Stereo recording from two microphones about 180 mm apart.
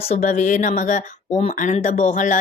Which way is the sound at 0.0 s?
40° left (ahead or behind).